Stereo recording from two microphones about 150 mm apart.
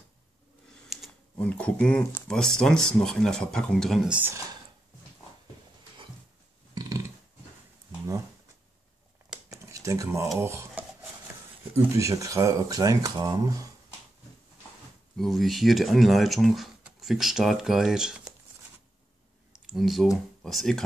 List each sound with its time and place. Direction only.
0.8 s computer keyboard: 5° left (ahead or behind)
2.2 s speech: 5° left (ahead or behind)
4.1 s speech: 15° right (ahead or behind)
9.5 s a sound: 20° right (ahead or behind)
11.7 s speech: 20° right (ahead or behind)
15.1 s speech: centre (ahead or behind)
19.6 s speech: centre (ahead or behind)